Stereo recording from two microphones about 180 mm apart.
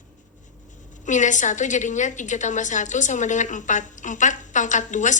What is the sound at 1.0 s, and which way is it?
A woman's voice, 45° left (ahead or behind).